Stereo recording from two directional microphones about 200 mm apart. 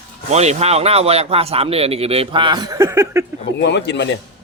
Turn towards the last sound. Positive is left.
turn(degrees=60)  # may be behind; listen again after turning